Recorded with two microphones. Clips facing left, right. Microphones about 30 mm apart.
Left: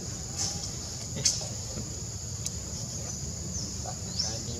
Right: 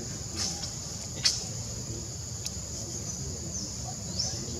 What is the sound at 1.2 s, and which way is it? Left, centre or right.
Speech, right.